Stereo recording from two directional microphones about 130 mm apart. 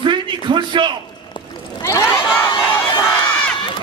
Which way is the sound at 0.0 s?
35° right (ahead or behind).